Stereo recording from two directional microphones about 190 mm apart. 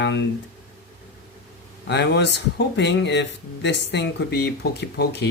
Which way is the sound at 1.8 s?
65° left (ahead or behind).